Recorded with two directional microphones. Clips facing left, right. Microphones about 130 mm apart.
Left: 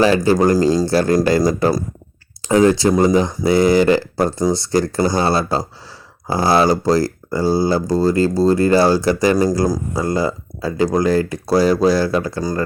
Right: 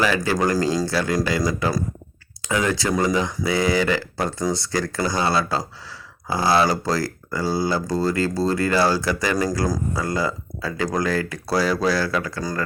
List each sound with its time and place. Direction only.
0.0 s speech: 30° left (ahead or behind)
0.9 s speech: 45° left (ahead or behind); by 12.6 s 25° left (ahead or behind)